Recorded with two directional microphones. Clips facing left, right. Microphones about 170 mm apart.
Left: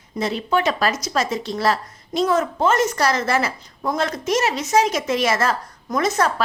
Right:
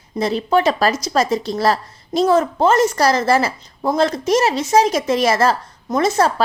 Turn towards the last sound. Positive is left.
turn(degrees=-30)  # may be behind; listen again after turning